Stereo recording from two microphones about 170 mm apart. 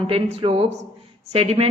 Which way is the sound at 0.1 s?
35° right (ahead or behind).